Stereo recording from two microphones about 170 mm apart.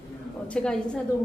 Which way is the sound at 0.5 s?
5° left (ahead or behind).